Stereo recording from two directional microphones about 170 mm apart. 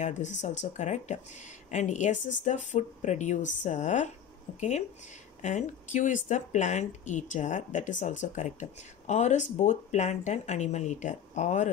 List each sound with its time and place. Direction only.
0.0 s speech: 45° left (ahead or behind)
2.1 s speech: 90° left
2.4 s speech: 45° left (ahead or behind)